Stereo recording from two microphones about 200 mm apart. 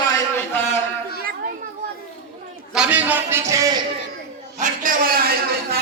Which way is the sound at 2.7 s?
5° right (ahead or behind).